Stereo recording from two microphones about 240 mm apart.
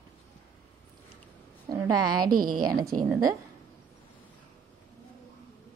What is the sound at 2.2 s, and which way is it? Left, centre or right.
Speech, right.